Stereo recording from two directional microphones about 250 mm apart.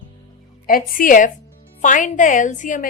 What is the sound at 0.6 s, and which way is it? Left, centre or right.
A woman's voice, left.